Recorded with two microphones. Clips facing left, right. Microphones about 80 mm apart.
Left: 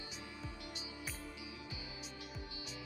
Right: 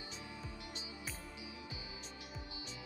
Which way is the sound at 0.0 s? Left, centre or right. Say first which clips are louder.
Even; right.